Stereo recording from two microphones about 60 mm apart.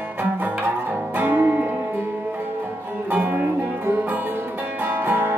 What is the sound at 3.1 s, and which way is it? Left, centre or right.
Music, right.